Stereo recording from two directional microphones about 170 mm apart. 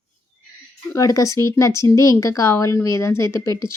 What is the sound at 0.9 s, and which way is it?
Speech, 20° left (ahead or behind).